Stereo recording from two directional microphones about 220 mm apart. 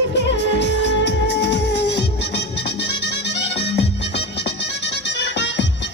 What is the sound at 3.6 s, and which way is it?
Music, 50° left (ahead or behind).